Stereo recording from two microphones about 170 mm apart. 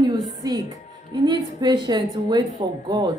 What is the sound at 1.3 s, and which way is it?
Speech, 25° right (ahead or behind).